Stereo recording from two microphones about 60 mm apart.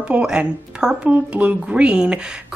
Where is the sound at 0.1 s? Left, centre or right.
Centre.